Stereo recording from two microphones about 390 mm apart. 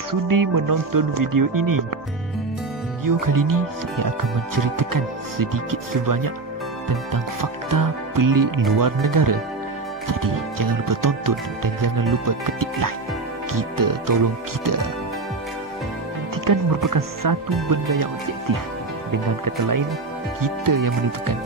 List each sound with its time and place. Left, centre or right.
0.1 s music: right
3.3 s music: right
7.7 s music: right
16.4 s music: right
20.4 s music: right